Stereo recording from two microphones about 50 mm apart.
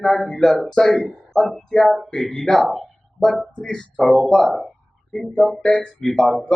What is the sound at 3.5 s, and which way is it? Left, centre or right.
Speech, centre.